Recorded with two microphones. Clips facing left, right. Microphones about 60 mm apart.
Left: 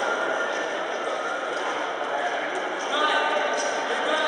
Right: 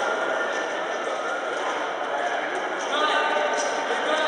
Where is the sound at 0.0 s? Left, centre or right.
Centre.